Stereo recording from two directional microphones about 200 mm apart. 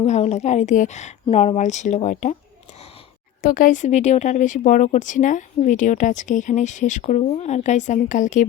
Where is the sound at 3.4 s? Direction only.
45° left (ahead or behind).